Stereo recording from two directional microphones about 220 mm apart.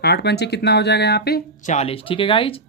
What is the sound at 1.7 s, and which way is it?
Speech, 25° left (ahead or behind).